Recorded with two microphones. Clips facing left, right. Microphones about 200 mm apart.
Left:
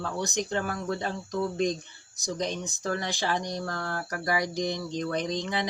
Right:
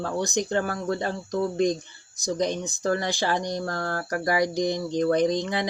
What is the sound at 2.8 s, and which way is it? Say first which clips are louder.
Speech: right 5 dB; 35° right (ahead or behind).